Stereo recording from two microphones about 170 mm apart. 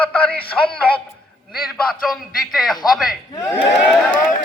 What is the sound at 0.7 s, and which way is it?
A man's voice, 10° left (ahead or behind).